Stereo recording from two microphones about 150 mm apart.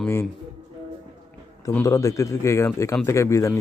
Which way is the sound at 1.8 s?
20° left (ahead or behind).